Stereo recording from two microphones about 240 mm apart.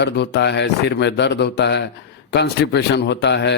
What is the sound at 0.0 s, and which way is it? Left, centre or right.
A man's voice, left.